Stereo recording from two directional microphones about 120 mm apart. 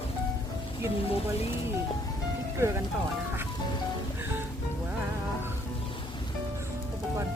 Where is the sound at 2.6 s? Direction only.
20° right (ahead or behind).